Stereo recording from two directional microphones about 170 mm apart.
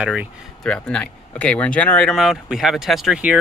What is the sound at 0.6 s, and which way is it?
Speech, 5° left (ahead or behind).